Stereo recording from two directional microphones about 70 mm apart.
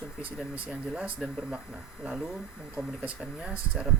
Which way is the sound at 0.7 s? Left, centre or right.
Centre.